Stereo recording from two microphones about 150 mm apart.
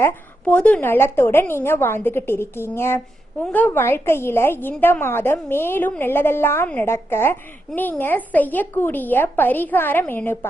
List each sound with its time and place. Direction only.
0.0 s a woman's voice: 10° left (ahead or behind)